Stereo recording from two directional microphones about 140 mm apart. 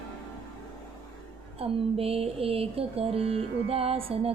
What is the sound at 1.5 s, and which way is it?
Music, 45° right (ahead or behind).